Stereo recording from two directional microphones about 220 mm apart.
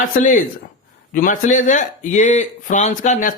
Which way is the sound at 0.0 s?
35° left (ahead or behind).